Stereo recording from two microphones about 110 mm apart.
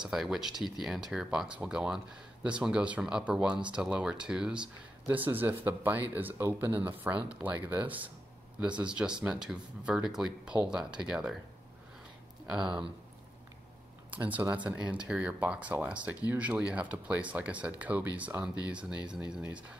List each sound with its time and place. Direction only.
0.0 s speech: 5° right (ahead or behind)
12.4 s speech: 5° right (ahead or behind)
14.1 s speech: 15° right (ahead or behind)